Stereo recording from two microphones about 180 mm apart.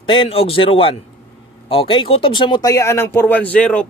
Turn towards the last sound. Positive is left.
turn(degrees=5)  # may be behind; listen again after turning